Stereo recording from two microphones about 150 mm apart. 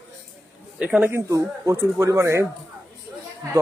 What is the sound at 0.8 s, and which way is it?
Speech, 10° right (ahead or behind).